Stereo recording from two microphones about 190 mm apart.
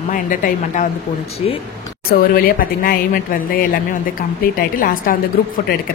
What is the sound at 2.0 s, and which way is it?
Speech, 50° left (ahead or behind).